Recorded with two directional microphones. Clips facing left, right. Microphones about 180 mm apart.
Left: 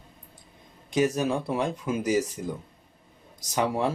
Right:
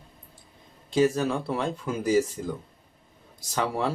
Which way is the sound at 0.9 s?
20° left (ahead or behind).